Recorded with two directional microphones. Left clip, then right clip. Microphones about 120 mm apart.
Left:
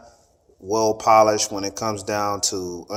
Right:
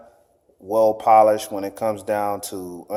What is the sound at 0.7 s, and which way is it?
Speech, 35° right (ahead or behind).